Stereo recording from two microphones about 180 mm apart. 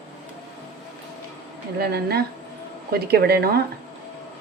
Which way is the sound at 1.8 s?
60° right (ahead or behind).